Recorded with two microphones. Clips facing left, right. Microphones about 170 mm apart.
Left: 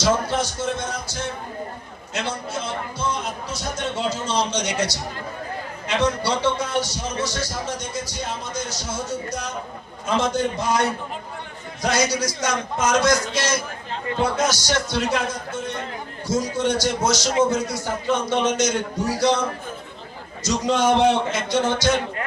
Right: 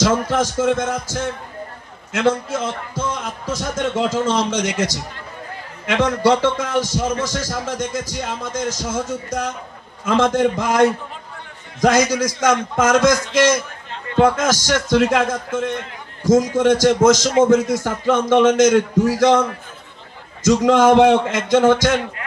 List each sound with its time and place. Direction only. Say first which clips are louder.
0.0 s speech: right 4 dB; 90° right
6.2 s speech: right 6 dB; 90° right
20.4 s speech: right 7 dB; 90° right